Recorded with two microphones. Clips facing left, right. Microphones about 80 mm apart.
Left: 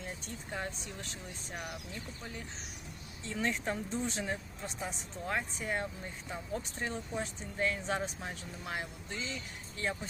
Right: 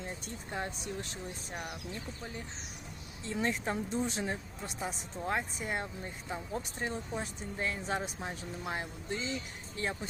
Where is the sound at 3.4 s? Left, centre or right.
Centre.